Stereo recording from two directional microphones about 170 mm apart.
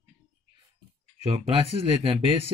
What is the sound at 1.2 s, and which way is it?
Speech, 35° right (ahead or behind).